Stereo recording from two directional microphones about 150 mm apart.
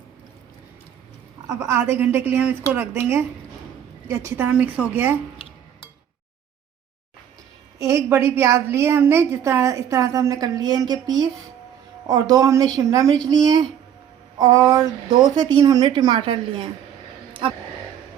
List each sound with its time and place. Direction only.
1.5 s a woman's voice: 15° right (ahead or behind)
7.8 s a woman's voice: 20° right (ahead or behind); by 16.6 s 35° right (ahead or behind)